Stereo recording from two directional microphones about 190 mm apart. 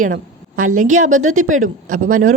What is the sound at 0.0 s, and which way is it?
A woman's voice, 45° right (ahead or behind).